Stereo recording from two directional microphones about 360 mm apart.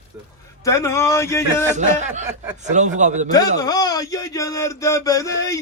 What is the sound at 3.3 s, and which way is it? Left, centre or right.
Male singing, centre.